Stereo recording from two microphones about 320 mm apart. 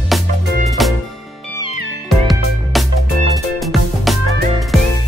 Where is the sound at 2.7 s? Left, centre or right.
Centre.